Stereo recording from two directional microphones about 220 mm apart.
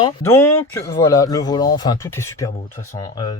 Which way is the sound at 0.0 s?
10° left (ahead or behind).